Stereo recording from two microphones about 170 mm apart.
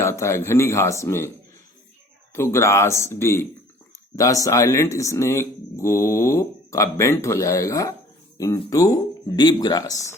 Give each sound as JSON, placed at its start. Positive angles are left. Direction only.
{"t": 0.0, "sound": "speech", "side_deg": 15}
{"t": 2.3, "sound": "speech", "side_deg": 15}